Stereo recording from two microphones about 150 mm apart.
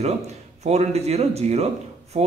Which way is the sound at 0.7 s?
45° right (ahead or behind).